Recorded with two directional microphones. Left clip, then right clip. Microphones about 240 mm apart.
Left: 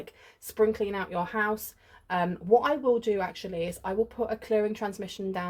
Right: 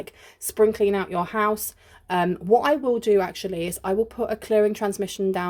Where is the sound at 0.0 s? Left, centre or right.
Right.